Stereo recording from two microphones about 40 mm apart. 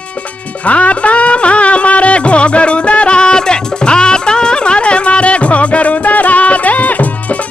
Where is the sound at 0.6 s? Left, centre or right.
Left.